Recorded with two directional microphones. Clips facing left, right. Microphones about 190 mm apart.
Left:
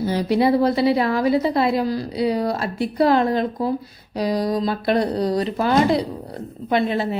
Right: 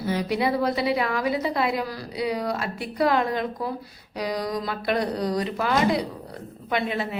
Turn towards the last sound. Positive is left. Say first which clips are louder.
# left 6 dB
turn(degrees=35)  # may be behind; listen again after turning